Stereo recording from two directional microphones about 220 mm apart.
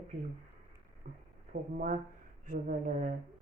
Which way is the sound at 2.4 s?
35° right (ahead or behind).